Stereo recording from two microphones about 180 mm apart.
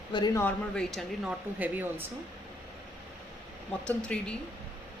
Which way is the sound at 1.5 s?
10° right (ahead or behind).